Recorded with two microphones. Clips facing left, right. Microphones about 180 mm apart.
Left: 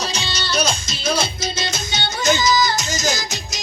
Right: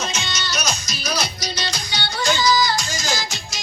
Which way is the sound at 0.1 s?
30° left (ahead or behind).